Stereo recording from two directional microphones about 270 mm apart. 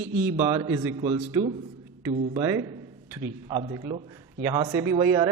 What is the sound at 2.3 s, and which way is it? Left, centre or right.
A man's voice, centre.